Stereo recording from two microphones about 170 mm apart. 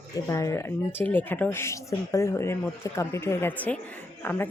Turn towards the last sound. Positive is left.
turn(degrees=10)  # may be behind; listen again after turning